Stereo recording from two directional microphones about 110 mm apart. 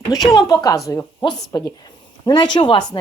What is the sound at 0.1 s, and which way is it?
Speech, 35° left (ahead or behind).